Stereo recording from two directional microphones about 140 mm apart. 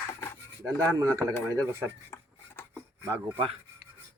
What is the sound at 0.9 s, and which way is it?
Speech, 20° right (ahead or behind).